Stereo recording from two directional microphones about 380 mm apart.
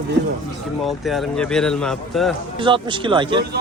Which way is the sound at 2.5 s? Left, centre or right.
Centre.